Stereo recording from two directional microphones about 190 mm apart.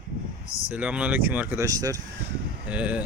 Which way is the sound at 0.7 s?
5° right (ahead or behind).